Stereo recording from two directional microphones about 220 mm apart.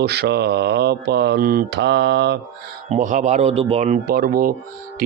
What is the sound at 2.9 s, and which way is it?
Speech, 35° right (ahead or behind).